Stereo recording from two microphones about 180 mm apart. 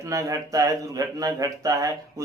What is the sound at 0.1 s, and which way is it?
Speech, 20° right (ahead or behind).